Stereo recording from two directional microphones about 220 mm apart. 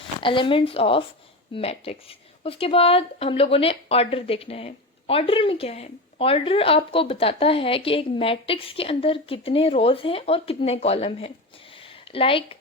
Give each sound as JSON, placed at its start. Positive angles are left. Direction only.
{"t": 0.2, "sound": "speech", "side_deg": 20}